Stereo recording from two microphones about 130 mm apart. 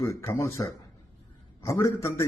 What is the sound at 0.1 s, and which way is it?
A man's voice, 25° left (ahead or behind).